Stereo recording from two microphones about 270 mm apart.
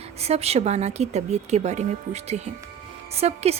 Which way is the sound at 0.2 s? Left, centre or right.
Right.